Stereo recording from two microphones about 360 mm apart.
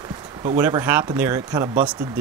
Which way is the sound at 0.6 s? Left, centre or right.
Centre.